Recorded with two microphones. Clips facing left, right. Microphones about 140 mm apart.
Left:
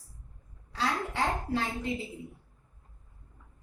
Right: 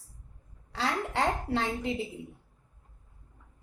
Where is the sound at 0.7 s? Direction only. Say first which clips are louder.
Right 1 dB; 80° right.